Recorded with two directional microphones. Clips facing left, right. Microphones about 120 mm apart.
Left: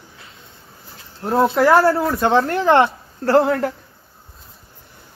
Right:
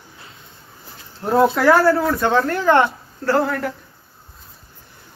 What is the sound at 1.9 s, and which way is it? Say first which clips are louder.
Speech: even; 30° left (ahead or behind).